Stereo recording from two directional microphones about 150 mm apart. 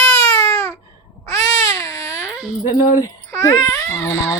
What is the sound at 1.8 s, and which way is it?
Baby cry, 25° left (ahead or behind).